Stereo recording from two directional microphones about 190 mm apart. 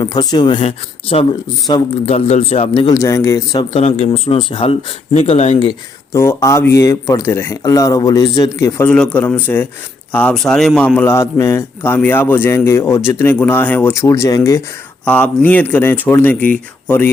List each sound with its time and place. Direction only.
0.0 s speech: 20° left (ahead or behind)
2.1 s speech: 35° left (ahead or behind)
6.1 s speech: 15° left (ahead or behind)
15.0 s speech: 5° left (ahead or behind)